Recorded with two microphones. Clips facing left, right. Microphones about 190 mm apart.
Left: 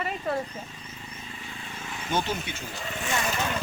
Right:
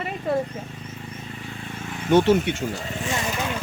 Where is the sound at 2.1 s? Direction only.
70° right (ahead or behind).